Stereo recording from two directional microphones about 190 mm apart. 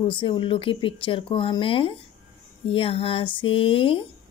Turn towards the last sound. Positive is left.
turn(degrees=30)  # may be behind; listen again after turning